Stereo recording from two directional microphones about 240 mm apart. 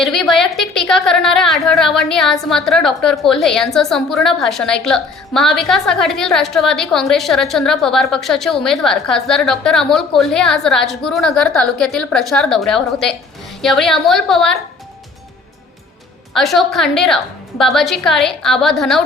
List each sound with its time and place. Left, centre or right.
0.0 s a woman's voice: centre
16.3 s a woman's voice: centre